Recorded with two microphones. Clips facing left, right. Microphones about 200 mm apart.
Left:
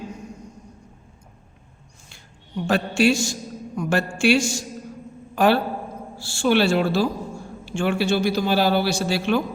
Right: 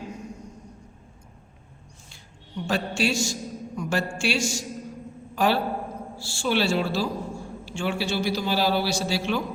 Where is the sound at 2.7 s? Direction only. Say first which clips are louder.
Left 6 dB; 55° left (ahead or behind).